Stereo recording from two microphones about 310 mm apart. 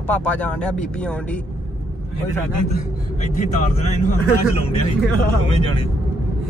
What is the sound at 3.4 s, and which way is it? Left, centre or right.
Speech, left.